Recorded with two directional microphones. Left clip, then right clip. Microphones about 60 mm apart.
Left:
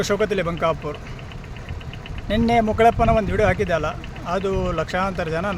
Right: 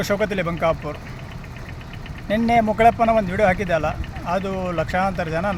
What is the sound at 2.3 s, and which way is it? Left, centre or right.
Speech, left.